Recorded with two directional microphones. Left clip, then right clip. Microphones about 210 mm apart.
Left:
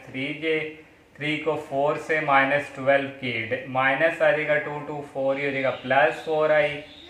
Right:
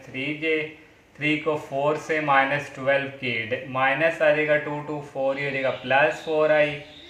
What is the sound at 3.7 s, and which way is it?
Speech, 15° right (ahead or behind).